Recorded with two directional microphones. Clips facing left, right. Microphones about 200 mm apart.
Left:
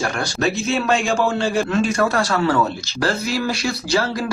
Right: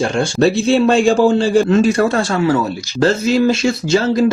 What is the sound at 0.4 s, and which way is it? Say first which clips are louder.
A man's voice: right 8 dB; 30° right (ahead or behind).